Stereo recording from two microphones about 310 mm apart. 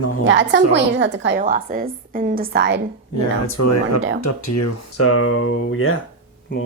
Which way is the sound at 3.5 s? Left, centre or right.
Left.